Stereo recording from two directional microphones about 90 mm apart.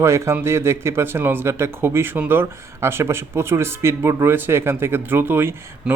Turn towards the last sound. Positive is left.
turn(degrees=-25)  # may be behind; listen again after turning